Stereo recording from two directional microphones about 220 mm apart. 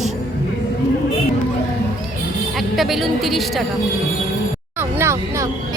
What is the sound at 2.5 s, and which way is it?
A woman's voice, centre (ahead or behind).